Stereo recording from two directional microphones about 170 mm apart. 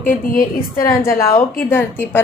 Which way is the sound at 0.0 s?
55° left (ahead or behind).